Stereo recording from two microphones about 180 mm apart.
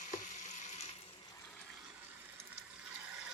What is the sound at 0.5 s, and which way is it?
Water, 40° left (ahead or behind).